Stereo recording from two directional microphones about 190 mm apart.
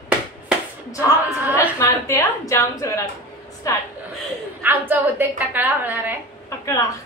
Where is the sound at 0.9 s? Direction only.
15° left (ahead or behind).